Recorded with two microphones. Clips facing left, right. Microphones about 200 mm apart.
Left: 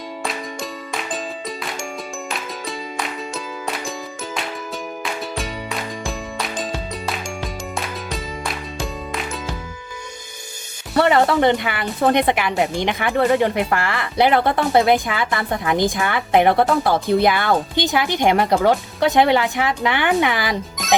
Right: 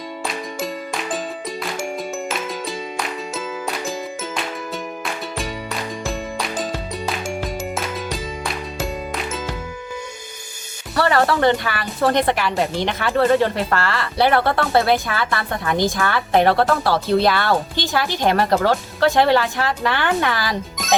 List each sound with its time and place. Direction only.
2.3 s music: centre (ahead or behind)
5.4 s music: centre (ahead or behind)
10.9 s speech: 20° left (ahead or behind)